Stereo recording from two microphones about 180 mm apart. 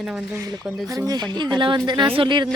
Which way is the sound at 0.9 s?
20° right (ahead or behind).